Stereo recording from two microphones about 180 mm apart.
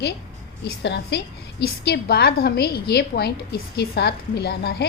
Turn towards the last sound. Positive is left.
turn(degrees=65)  # may be behind; listen again after turning